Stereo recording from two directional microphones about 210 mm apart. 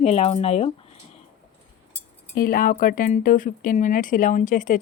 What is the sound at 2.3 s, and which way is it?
Speech, 45° left (ahead or behind).